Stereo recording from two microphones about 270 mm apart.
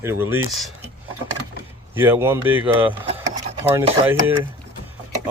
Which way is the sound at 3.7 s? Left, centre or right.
Centre.